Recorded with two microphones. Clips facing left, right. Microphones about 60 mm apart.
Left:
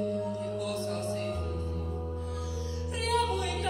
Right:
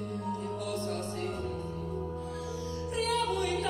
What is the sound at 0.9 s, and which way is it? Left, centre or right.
Music, left.